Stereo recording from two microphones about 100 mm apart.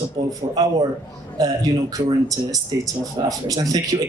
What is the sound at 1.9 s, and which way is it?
A man's voice, 35° right (ahead or behind).